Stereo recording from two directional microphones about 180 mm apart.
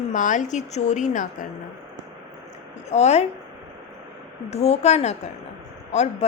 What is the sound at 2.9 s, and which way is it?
Speech, 35° left (ahead or behind).